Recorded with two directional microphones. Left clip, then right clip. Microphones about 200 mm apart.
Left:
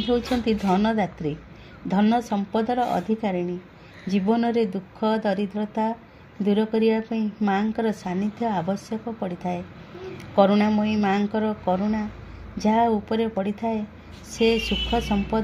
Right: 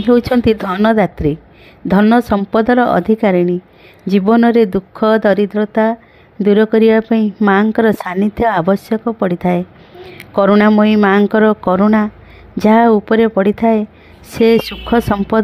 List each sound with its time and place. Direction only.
0.0 s speech: 50° right (ahead or behind)